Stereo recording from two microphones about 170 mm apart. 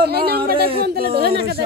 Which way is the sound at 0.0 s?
65° right (ahead or behind).